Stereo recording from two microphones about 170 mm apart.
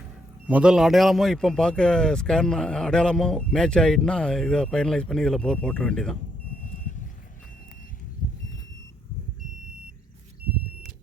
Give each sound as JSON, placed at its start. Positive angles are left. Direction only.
{"t": 0.4, "sound": "a man's voice", "side_deg": -5}
{"t": 6.6, "sound": "vehicle", "side_deg": 45}